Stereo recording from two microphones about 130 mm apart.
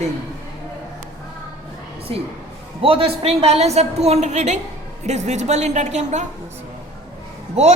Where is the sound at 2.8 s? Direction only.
45° right (ahead or behind); by 6.2 s 65° right (ahead or behind).